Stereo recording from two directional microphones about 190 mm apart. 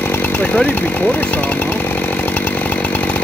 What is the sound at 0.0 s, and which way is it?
Chainsaw, 10° left (ahead or behind).